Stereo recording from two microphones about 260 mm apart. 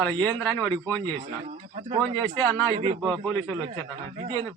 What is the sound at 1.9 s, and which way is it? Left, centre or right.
Speech, centre.